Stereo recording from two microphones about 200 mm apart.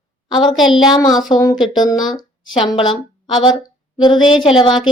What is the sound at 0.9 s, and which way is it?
Speech, 20° left (ahead or behind).